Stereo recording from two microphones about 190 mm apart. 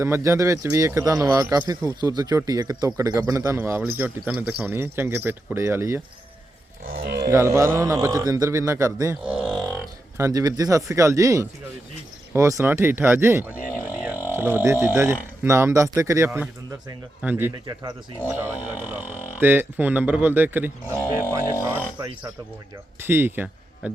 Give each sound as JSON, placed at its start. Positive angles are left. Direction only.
{"t": 0.0, "sound": "speech", "side_deg": -15}
{"t": 7.0, "sound": "speech", "side_deg": -55}
{"t": 7.3, "sound": "speech", "side_deg": -15}
{"t": 9.3, "sound": "livestock", "side_deg": -5}
{"t": 10.2, "sound": "speech", "side_deg": -15}
{"t": 21.6, "sound": "a sound", "side_deg": -10}
{"t": 23.0, "sound": "a man's voice", "side_deg": -10}